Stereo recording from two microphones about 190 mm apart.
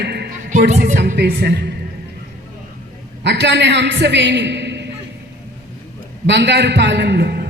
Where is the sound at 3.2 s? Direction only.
65° right (ahead or behind).